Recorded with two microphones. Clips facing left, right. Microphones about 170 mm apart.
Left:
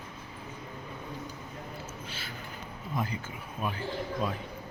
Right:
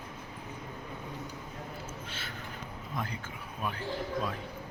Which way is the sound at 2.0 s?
10° left (ahead or behind).